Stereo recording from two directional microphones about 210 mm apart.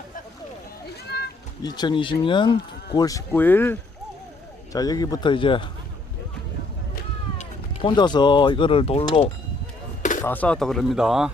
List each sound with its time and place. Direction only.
1.6 s speech: 20° left (ahead or behind)
7.3 s speech: 25° left (ahead or behind)
10.2 s speech: 5° left (ahead or behind)